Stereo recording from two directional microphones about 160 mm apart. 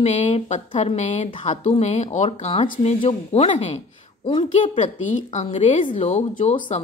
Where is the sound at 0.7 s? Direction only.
45° left (ahead or behind).